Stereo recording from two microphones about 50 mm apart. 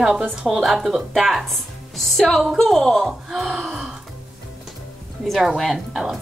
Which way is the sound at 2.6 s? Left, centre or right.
Centre.